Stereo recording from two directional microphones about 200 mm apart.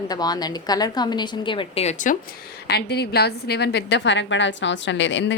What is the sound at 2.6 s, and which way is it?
A woman's voice, 55° left (ahead or behind).